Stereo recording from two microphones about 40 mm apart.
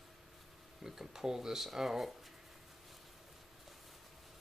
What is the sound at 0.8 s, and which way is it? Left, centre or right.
Speech, centre.